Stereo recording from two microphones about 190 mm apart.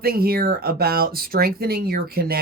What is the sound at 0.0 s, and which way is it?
Speech, 55° right (ahead or behind).